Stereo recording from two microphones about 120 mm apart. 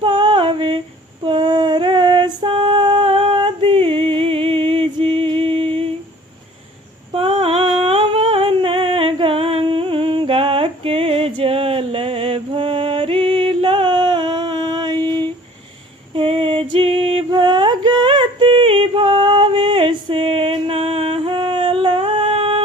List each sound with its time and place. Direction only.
0.0 s female singing: 45° right (ahead or behind)
7.1 s humming: 50° right (ahead or behind)
16.1 s a sound: 50° right (ahead or behind)